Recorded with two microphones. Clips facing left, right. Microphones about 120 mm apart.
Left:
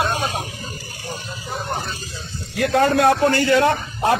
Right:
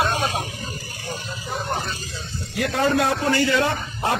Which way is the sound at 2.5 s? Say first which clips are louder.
Left 4 dB; 60° left (ahead or behind).